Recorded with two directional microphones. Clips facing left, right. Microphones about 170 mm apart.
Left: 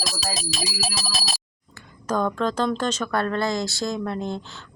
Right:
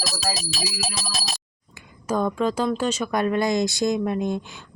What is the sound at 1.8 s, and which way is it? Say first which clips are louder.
Speech: even; 10° right (ahead or behind).